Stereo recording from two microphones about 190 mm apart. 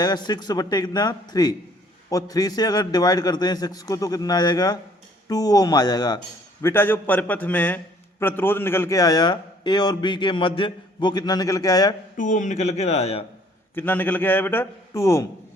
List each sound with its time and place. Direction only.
0.0 s a man's voice: 20° left (ahead or behind)
12.1 s a man's voice: 40° left (ahead or behind)
13.7 s a man's voice: 10° left (ahead or behind)